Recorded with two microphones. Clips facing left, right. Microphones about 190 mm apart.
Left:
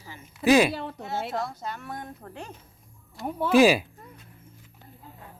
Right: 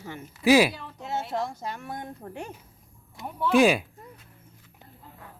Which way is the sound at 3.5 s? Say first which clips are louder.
Left 2 dB; centre (ahead or behind).